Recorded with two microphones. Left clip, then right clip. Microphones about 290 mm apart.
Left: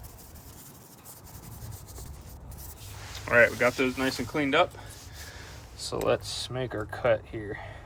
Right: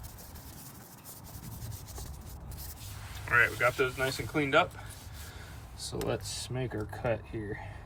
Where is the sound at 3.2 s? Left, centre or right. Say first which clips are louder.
Left 4 dB; centre.